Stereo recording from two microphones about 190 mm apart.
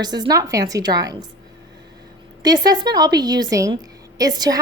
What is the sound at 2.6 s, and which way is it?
A woman's voice, 20° right (ahead or behind).